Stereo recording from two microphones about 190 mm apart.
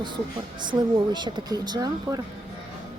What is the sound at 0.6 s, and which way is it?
Speech, 25° right (ahead or behind).